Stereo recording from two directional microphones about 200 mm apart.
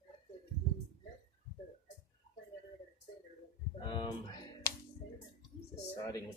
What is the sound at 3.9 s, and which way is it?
Music, 25° left (ahead or behind).